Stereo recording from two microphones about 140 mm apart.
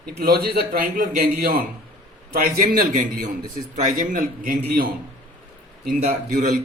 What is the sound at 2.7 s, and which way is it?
A man's voice, 65° right (ahead or behind).